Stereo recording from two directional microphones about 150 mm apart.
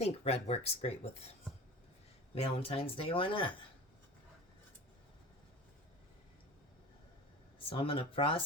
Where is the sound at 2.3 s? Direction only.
40° left (ahead or behind).